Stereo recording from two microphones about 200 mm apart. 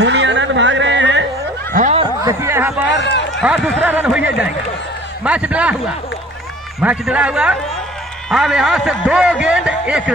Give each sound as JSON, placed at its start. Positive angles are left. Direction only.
{"t": 0.0, "sound": "a sound", "side_deg": -65}
{"t": 1.7, "sound": "snicker", "side_deg": -40}
{"t": 2.2, "sound": "a sound", "side_deg": -15}
{"t": 2.9, "sound": "run", "side_deg": 60}
{"t": 3.4, "sound": "a man's voice", "side_deg": -5}
{"t": 6.8, "sound": "a man's voice", "side_deg": -5}